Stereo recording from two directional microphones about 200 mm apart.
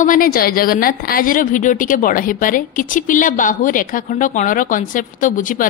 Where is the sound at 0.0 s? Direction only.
45° left (ahead or behind).